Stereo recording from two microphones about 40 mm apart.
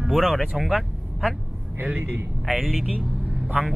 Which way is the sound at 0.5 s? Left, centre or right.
Centre.